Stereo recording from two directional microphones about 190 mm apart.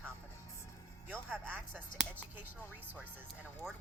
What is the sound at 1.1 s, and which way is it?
Speech, 10° right (ahead or behind).